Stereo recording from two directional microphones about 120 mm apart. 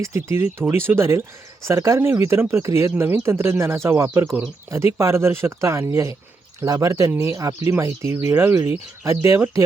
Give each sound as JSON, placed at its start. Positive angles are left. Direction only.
{"t": 0.0, "sound": "speech", "side_deg": -20}